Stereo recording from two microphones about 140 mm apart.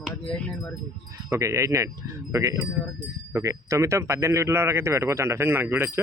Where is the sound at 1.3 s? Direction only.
20° right (ahead or behind).